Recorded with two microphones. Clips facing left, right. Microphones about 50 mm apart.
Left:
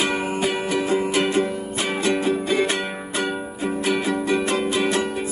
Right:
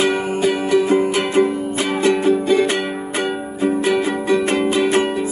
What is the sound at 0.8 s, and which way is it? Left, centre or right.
Music, right.